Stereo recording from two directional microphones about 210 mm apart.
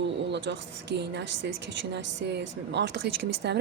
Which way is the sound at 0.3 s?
55° right (ahead or behind).